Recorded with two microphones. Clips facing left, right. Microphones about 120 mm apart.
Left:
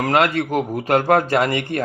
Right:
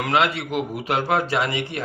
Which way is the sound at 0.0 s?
45° left (ahead or behind).